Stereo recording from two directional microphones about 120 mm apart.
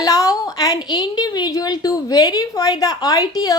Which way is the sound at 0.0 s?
30° left (ahead or behind).